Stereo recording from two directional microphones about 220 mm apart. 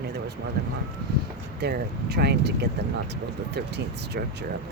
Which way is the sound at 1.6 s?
45° right (ahead or behind).